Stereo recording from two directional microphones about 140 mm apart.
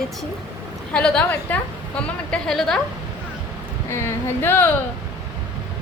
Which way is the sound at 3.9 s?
20° left (ahead or behind).